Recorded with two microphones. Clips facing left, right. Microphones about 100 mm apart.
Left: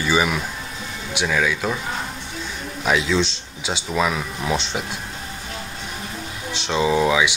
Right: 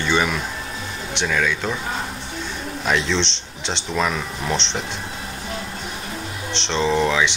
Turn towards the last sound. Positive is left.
turn(degrees=10)  # may be behind; listen again after turning